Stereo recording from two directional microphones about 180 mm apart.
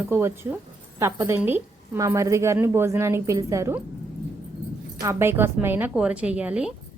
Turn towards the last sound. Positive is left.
turn(degrees=-5)  # may be behind; listen again after turning